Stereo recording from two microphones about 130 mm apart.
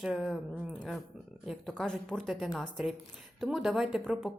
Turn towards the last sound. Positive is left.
turn(degrees=0)  # may be behind; listen again after turning